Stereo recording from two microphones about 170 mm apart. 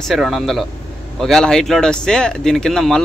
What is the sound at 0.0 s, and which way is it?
Speech, centre (ahead or behind).